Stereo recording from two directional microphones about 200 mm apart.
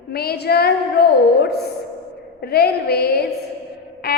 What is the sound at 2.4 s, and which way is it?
Speech, 50° left (ahead or behind).